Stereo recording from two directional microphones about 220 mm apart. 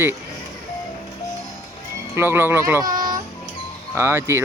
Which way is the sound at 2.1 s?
10° right (ahead or behind).